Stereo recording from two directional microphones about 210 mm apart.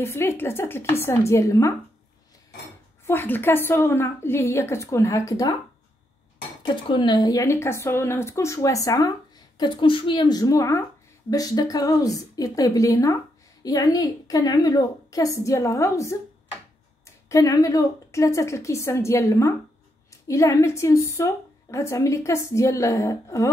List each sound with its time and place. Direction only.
0.0 s a woman's voice: 10° left (ahead or behind)
3.1 s a woman's voice: 10° left (ahead or behind)
6.6 s a woman's voice: 20° left (ahead or behind)
17.3 s a woman's voice: 15° left (ahead or behind)